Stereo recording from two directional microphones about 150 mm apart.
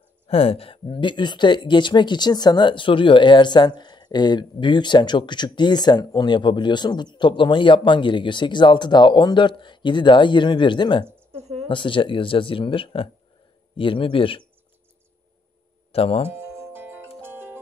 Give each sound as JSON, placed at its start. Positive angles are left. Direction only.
{"t": 0.3, "sound": "speech", "side_deg": 40}
{"t": 11.3, "sound": "a sound", "side_deg": -45}
{"t": 11.7, "sound": "speech", "side_deg": 35}
{"t": 15.9, "sound": "speech", "side_deg": 40}
{"t": 16.3, "sound": "music", "side_deg": -15}